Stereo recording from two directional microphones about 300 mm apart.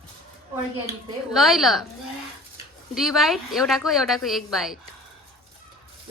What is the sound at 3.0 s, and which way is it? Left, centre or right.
A woman's voice, centre.